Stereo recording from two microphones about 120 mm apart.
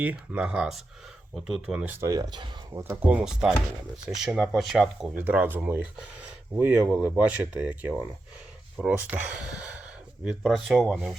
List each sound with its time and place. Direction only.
0.0 s speech: 10° right (ahead or behind)
2.0 s speech: 30° right (ahead or behind)
2.9 s speech: 10° right (ahead or behind)
5.1 s speech: 15° right (ahead or behind)